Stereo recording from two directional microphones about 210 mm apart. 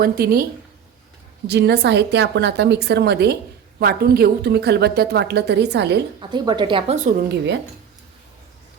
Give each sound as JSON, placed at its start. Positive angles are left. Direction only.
{"t": 0.0, "sound": "a woman's voice", "side_deg": -45}
{"t": 1.5, "sound": "a woman's voice", "side_deg": -55}
{"t": 6.1, "sound": "speech", "side_deg": -20}